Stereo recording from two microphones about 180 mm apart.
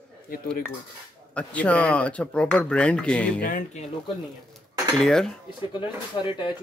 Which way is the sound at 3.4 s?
45° left (ahead or behind).